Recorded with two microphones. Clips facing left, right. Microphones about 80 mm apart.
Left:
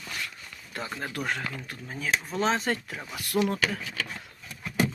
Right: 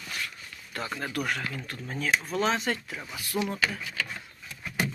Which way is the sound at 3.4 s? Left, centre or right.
Left.